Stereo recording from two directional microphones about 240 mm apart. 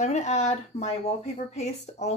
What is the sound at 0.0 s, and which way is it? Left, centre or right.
A woman's voice, left.